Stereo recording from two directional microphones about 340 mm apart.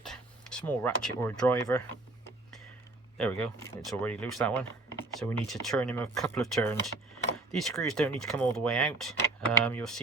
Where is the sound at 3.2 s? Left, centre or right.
Centre.